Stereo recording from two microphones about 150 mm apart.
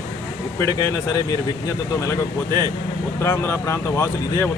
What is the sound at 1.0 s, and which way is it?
Speech, 25° left (ahead or behind).